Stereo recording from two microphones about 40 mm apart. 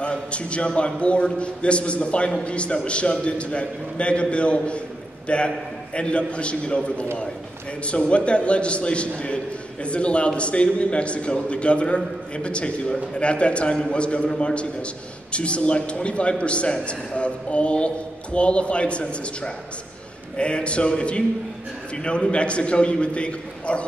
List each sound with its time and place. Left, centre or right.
0.0 s a man's voice: left